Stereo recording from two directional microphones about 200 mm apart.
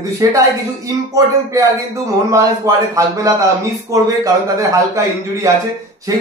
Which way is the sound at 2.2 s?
15° right (ahead or behind).